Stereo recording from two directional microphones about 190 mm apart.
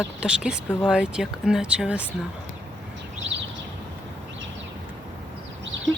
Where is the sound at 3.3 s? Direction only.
70° right (ahead or behind).